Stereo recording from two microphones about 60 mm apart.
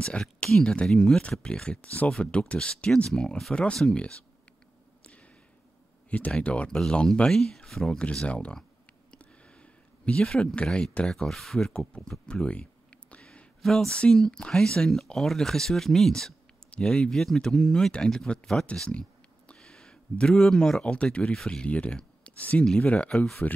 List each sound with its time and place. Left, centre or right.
0.0 s speech: centre
3.1 s speech: centre
3.5 s speech: centre
5.0 s a sound: left
6.0 s speech: left
7.2 s speech: centre
8.0 s speech: centre
9.2 s a sound: centre
10.3 s speech: centre
12.4 s a sound: centre
13.6 s speech: centre; by 23.6 s left